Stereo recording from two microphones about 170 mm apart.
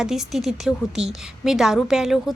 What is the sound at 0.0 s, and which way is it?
A woman's voice, centre (ahead or behind).